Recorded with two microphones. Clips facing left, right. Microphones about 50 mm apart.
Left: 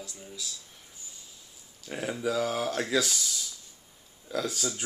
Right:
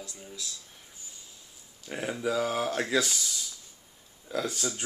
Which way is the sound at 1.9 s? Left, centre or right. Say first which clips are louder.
Even; centre.